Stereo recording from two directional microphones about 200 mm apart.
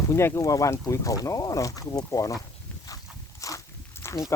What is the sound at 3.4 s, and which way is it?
Walk, 15° left (ahead or behind).